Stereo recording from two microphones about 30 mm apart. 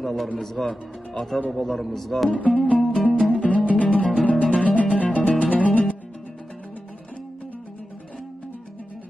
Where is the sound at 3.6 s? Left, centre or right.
Left.